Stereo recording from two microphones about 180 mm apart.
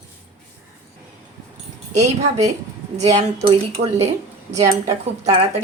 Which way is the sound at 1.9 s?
40° right (ahead or behind).